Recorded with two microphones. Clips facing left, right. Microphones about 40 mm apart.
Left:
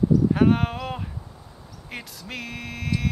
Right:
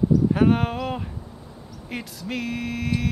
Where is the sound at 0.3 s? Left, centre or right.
Centre.